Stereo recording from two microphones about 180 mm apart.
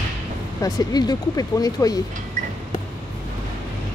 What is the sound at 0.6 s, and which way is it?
Speech, 20° left (ahead or behind).